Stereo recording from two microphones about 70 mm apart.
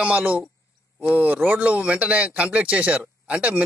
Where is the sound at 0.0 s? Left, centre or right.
Right.